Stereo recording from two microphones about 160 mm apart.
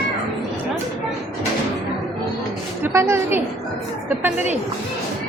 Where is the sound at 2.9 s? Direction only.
15° right (ahead or behind).